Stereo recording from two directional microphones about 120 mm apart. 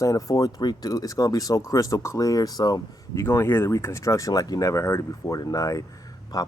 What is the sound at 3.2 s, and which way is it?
Speech, 20° left (ahead or behind).